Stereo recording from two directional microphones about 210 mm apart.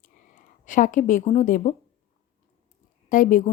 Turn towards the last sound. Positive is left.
turn(degrees=40)  # may be behind; listen again after turning